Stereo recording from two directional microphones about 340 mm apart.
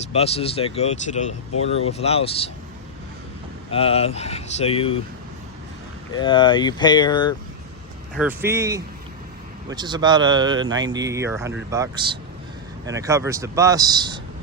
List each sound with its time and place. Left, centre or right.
0.1 s speech: centre
3.7 s speech: centre
6.1 s speech: centre
8.1 s speech: centre